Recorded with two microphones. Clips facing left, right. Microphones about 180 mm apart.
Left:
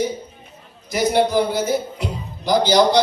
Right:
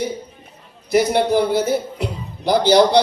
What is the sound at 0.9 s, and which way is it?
A man's voice, 60° right (ahead or behind).